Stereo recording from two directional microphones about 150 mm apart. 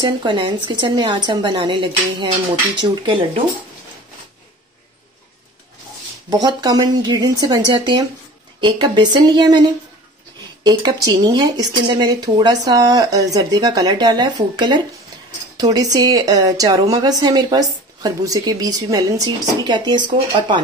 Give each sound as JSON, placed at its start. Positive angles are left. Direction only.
{"t": 0.0, "sound": "speech", "side_deg": -30}
{"t": 6.3, "sound": "a woman's voice", "side_deg": -25}